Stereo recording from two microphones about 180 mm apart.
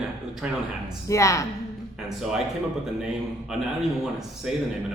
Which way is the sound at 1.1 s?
15° left (ahead or behind).